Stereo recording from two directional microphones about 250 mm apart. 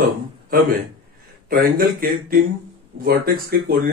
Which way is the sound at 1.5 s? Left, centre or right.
Right.